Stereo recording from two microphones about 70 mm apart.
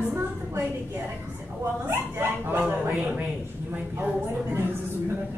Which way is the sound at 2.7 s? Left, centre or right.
Right.